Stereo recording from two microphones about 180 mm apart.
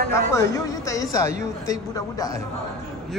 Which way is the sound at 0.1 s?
15° left (ahead or behind).